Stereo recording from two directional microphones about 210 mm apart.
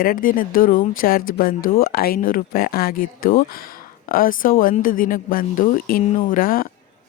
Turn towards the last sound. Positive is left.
turn(degrees=45)  # may be behind; listen again after turning